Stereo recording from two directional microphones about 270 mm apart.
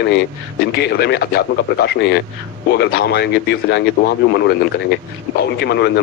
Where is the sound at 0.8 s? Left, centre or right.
Left.